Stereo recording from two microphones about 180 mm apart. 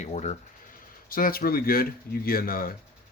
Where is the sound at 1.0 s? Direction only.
55° left (ahead or behind).